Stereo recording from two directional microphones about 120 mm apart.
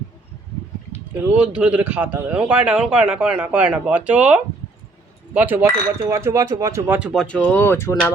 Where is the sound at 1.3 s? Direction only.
10° right (ahead or behind).